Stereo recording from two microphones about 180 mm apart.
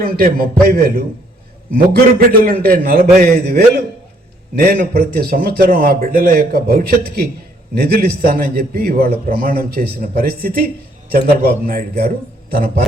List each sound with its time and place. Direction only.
0.0 s a man's voice: 55° right (ahead or behind)
11.6 s a man's voice: 55° right (ahead or behind)